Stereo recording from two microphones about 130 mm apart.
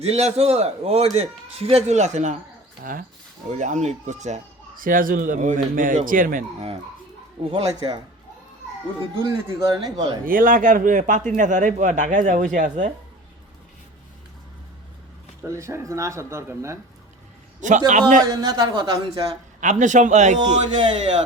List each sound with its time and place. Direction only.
0.0 s a man's voice: 55° right (ahead or behind)
3.5 s speech: 70° right (ahead or behind); by 6.4 s 90° right
7.4 s a man's voice: 35° right (ahead or behind)
9.5 s a man's voice: 30° right (ahead or behind)
10.2 s speech: 90° right; by 12.9 s 70° right (ahead or behind)
15.4 s speech: 25° right (ahead or behind)
17.6 s speech: 70° right (ahead or behind)
18.3 s speech: 30° right (ahead or behind)
19.5 s speech: 75° right (ahead or behind)